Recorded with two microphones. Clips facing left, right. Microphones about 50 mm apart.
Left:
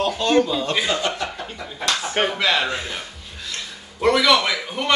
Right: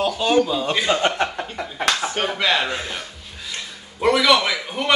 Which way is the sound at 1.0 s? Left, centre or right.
Right.